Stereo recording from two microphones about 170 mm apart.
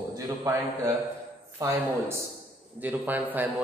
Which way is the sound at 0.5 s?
20° right (ahead or behind).